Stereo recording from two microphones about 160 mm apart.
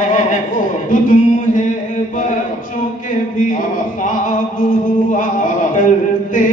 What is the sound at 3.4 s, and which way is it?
Mantra, 55° left (ahead or behind).